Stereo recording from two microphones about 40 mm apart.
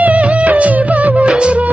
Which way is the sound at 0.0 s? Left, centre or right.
Right.